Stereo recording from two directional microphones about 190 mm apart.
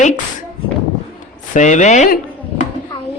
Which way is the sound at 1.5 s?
40° left (ahead or behind).